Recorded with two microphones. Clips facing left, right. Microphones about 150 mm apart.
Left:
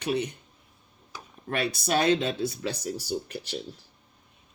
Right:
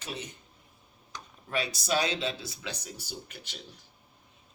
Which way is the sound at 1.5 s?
60° left (ahead or behind).